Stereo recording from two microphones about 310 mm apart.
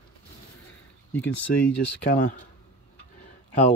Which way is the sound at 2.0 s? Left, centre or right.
Left.